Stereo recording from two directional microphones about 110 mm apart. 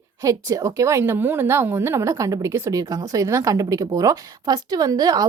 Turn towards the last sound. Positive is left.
turn(degrees=-35)  # may be behind; listen again after turning